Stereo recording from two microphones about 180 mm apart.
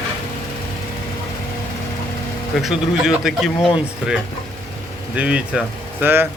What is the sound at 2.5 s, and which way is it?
Speech, centre (ahead or behind).